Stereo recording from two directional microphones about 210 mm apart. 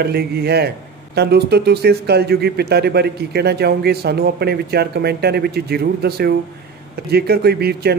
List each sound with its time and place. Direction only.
0.0 s speech: 50° right (ahead or behind)